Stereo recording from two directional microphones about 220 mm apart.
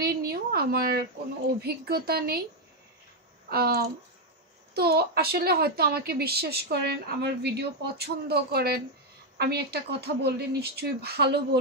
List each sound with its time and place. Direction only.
0.0 s a sound: 45° right (ahead or behind)
1.6 s a woman's voice: 45° right (ahead or behind)
3.4 s a woman's voice: 45° right (ahead or behind)